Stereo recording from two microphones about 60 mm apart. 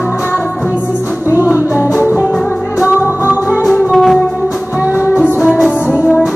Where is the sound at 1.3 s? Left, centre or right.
Right.